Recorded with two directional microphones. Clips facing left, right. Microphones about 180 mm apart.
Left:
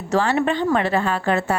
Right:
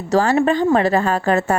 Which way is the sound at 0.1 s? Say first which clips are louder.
Right 4 dB; 40° right (ahead or behind).